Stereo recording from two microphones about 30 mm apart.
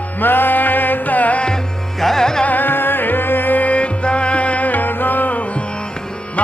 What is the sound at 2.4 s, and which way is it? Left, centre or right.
Music, left.